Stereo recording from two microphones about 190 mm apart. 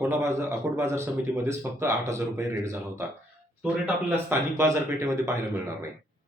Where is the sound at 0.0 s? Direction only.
15° right (ahead or behind).